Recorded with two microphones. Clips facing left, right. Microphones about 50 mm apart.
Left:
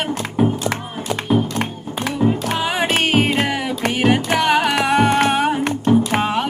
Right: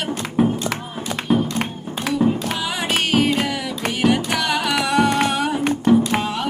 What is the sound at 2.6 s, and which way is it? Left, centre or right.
Music, left.